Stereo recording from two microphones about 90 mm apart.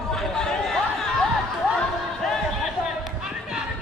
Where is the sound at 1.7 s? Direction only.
5° left (ahead or behind).